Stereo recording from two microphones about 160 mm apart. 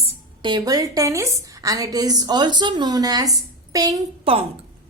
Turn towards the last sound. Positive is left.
turn(degrees=-35)  # may be behind; listen again after turning